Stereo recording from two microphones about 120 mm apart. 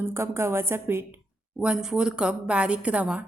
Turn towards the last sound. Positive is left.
turn(degrees=-10)  # may be behind; listen again after turning